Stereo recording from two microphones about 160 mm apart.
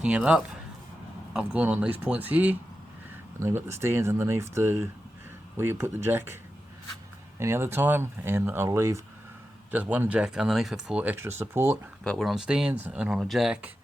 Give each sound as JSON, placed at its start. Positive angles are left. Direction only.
{"t": 0.0, "sound": "speech", "side_deg": -5}
{"t": 7.3, "sound": "speech", "side_deg": -15}
{"t": 12.0, "sound": "speech", "side_deg": 0}